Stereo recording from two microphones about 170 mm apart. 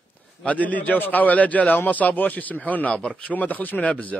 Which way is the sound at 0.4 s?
10° left (ahead or behind).